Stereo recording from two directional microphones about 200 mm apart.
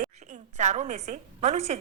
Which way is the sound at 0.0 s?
40° right (ahead or behind).